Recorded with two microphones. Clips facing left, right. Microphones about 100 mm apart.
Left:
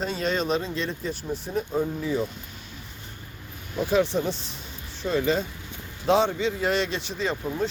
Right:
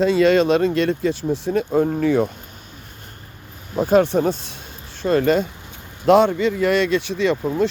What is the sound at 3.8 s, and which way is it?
Speech, 50° right (ahead or behind).